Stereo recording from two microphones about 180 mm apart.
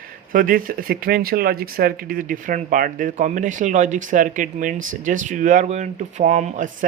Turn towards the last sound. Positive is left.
turn(degrees=-45)  # may be behind; listen again after turning